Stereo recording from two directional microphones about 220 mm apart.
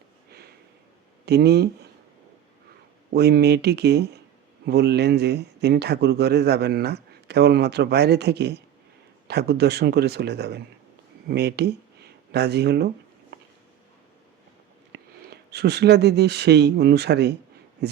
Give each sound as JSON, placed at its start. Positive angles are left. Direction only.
{"t": 0.3, "sound": "sniff", "side_deg": -45}
{"t": 1.2, "sound": "speech", "side_deg": -45}
{"t": 3.1, "sound": "speech", "side_deg": -45}
{"t": 14.9, "sound": "speech", "side_deg": -50}